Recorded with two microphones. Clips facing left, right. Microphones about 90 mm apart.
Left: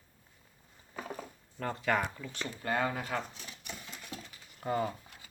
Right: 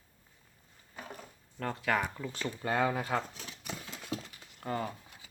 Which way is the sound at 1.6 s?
Centre (ahead or behind).